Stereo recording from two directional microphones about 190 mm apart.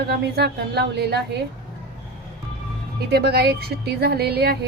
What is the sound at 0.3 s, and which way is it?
Speech, 60° right (ahead or behind).